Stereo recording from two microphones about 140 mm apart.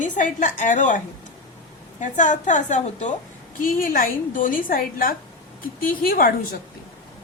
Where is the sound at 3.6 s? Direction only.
80° left.